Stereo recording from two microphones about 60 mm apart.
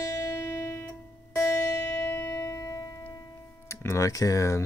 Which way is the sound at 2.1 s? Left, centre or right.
Left.